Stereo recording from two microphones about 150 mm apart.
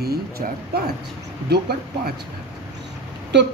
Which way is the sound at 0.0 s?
90° right.